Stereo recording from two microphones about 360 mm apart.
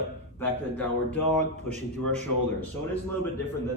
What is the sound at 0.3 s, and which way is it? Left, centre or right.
Speech, centre.